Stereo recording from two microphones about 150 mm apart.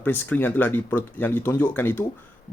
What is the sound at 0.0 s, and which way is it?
Speech, 15° left (ahead or behind).